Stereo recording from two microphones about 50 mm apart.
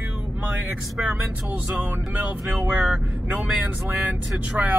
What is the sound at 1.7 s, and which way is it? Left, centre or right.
Speech, right.